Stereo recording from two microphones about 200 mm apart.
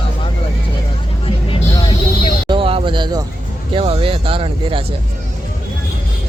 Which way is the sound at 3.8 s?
25° right (ahead or behind).